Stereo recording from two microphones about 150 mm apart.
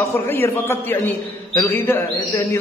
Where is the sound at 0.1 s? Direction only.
15° left (ahead or behind).